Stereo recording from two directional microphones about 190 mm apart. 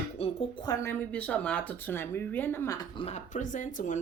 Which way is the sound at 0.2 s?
30° left (ahead or behind).